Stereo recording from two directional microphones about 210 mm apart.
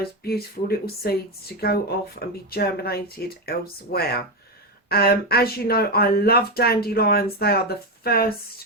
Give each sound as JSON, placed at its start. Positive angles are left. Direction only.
{"t": 0.0, "sound": "speech", "side_deg": 45}